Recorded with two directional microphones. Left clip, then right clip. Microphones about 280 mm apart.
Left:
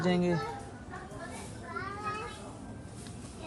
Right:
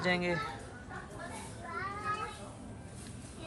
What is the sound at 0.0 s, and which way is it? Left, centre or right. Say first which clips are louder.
Speech: left 1 dB; centre.